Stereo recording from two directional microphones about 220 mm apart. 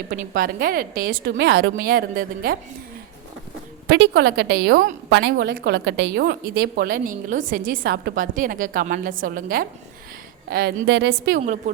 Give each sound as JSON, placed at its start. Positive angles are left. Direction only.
{"t": 0.1, "sound": "a woman's voice", "side_deg": -40}
{"t": 3.8, "sound": "a woman's voice", "side_deg": -50}